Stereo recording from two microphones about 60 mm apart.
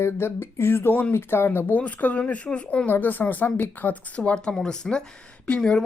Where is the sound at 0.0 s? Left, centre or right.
Left.